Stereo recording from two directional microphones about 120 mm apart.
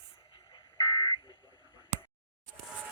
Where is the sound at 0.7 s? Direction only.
25° left (ahead or behind).